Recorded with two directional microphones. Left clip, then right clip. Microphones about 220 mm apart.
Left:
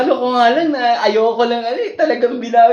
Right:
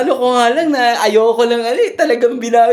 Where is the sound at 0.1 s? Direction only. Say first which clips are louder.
Right 2 dB; 45° right (ahead or behind).